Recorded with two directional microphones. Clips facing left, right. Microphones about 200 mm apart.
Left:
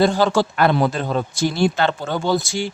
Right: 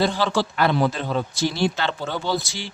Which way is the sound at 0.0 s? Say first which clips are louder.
Left 5 dB; 45° left (ahead or behind).